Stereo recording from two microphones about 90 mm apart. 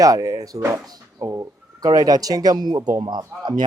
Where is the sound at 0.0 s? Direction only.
40° right (ahead or behind).